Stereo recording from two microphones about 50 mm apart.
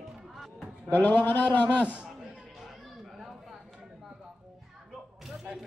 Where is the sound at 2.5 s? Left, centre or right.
Centre.